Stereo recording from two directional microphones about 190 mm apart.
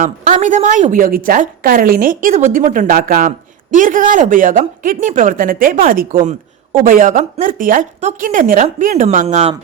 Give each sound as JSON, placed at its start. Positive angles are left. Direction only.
{"t": 0.0, "sound": "speech", "side_deg": -40}